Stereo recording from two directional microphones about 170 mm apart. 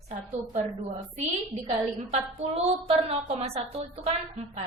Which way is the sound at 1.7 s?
35° right (ahead or behind).